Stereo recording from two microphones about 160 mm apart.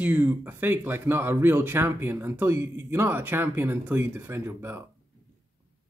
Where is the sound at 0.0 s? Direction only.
10° right (ahead or behind).